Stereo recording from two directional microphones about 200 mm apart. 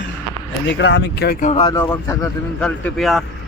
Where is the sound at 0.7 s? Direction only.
65° left (ahead or behind).